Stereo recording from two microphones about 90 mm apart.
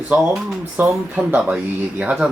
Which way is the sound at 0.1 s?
15° right (ahead or behind).